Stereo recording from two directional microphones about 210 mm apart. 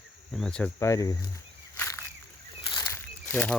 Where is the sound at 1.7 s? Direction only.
10° left (ahead or behind).